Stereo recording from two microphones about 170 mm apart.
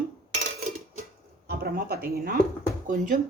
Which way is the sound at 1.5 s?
65° right (ahead or behind).